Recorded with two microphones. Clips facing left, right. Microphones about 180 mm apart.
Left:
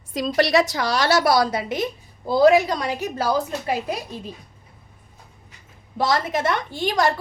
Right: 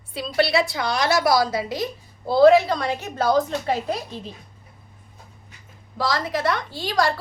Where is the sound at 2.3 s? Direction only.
15° left (ahead or behind).